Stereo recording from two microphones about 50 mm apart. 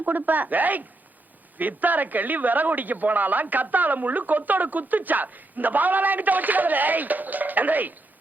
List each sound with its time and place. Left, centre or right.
0.0 s a man's voice: right